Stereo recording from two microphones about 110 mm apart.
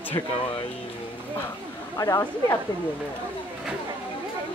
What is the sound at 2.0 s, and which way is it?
Speech, 30° left (ahead or behind).